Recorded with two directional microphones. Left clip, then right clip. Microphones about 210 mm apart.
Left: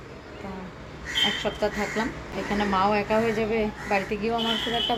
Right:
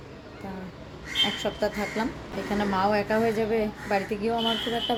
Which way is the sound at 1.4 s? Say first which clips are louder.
Left 1 dB; 15° right (ahead or behind).